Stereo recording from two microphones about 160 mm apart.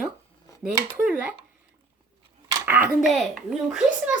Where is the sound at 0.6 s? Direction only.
10° right (ahead or behind).